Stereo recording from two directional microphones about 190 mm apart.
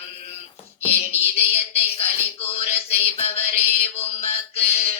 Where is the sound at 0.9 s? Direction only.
30° left (ahead or behind).